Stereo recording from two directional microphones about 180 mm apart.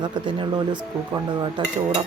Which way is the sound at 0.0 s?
25° right (ahead or behind).